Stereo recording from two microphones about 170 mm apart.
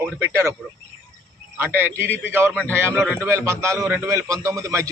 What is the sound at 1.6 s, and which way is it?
Speech, 10° right (ahead or behind).